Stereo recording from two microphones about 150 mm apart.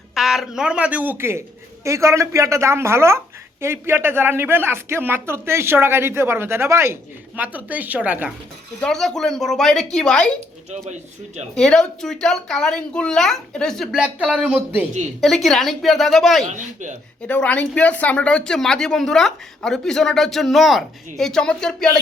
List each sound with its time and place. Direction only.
0.1 s speech: centre (ahead or behind)
8.8 s speech: 5° left (ahead or behind)
11.5 s speech: 5° left (ahead or behind)
15.2 s speech: centre (ahead or behind)